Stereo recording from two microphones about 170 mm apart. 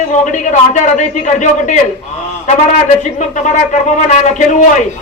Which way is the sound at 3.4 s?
45° left (ahead or behind).